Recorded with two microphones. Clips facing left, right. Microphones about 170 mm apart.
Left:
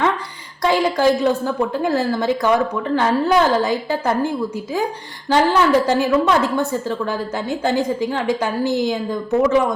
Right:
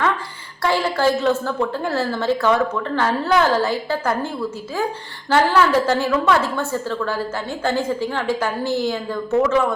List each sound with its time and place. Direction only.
0.6 s a woman's voice: 15° left (ahead or behind)